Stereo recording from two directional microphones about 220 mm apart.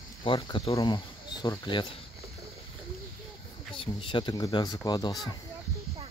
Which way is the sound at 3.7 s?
25° left (ahead or behind).